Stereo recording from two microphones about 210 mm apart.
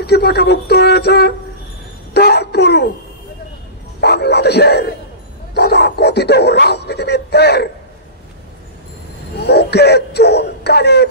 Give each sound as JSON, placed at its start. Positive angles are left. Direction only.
{"t": 0.0, "sound": "speech", "side_deg": 50}
{"t": 4.0, "sound": "speech", "side_deg": 50}
{"t": 9.4, "sound": "speech", "side_deg": 50}